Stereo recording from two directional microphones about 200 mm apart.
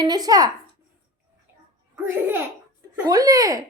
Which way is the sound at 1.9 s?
10° right (ahead or behind).